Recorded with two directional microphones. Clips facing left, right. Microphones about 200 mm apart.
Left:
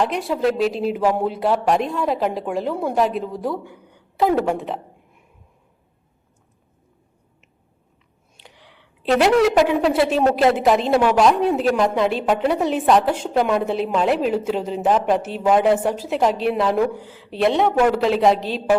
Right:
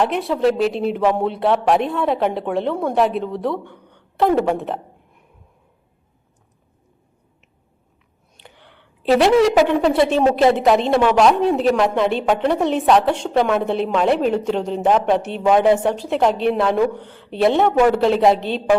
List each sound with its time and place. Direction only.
0.0 s a woman's voice: centre (ahead or behind)
8.4 s a woman's voice: centre (ahead or behind)